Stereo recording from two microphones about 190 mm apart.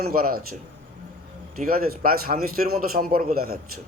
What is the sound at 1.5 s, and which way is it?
A man's voice, 50° right (ahead or behind).